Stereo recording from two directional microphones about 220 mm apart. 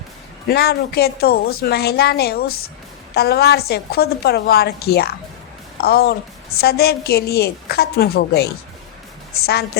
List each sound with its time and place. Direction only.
0.4 s a woman's voice: 45° left (ahead or behind)